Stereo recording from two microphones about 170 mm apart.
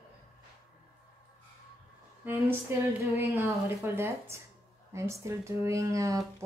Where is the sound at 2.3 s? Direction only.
15° right (ahead or behind).